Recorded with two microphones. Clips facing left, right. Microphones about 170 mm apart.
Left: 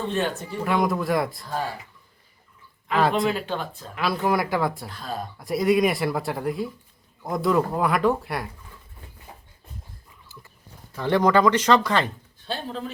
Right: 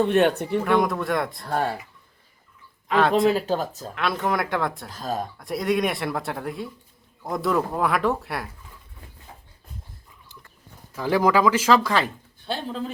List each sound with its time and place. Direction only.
0.0 s speech: 65° right (ahead or behind)
0.6 s speech: centre (ahead or behind)
1.5 s speech: 60° right (ahead or behind)
2.9 s speech: centre (ahead or behind)
3.2 s speech: 40° right (ahead or behind)
3.9 s speech: centre (ahead or behind)
4.9 s speech: 40° right (ahead or behind)
5.4 s speech: centre (ahead or behind)
10.9 s speech: 5° right (ahead or behind)